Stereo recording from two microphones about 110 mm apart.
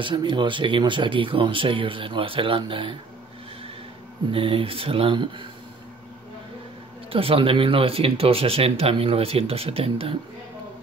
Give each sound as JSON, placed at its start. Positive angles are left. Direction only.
{"t": 0.0, "sound": "speech", "side_deg": -45}
{"t": 4.3, "sound": "speech", "side_deg": -55}
{"t": 7.1, "sound": "speech", "side_deg": -55}